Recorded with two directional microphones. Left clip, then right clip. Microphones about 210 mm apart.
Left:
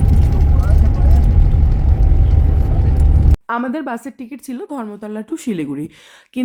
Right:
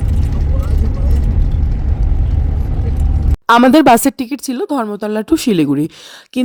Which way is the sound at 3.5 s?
50° right (ahead or behind).